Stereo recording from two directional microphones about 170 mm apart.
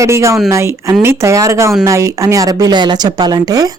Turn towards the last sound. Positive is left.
turn(degrees=-20)  # may be behind; listen again after turning